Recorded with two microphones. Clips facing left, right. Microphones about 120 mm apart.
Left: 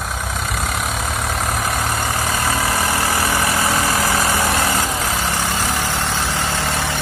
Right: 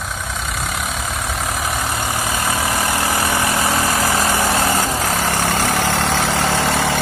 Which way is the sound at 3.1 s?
20° right (ahead or behind).